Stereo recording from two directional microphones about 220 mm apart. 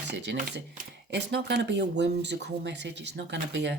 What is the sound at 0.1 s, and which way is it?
Speech, 50° right (ahead or behind).